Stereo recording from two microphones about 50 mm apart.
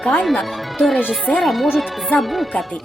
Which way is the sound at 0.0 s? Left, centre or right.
Centre.